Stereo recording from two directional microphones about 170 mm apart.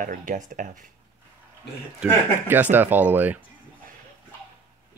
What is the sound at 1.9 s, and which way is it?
Speech, 10° right (ahead or behind).